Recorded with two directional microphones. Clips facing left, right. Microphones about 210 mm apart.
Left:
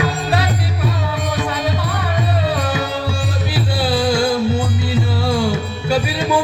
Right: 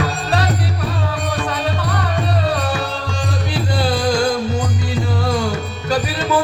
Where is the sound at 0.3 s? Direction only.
10° left (ahead or behind).